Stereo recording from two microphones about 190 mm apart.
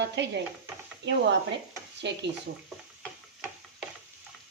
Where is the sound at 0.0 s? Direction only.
65° right (ahead or behind).